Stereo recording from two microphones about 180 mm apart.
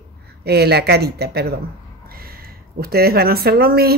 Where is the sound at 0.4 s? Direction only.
65° right (ahead or behind).